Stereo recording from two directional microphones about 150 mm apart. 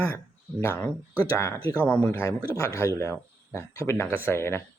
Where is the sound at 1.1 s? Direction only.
15° right (ahead or behind).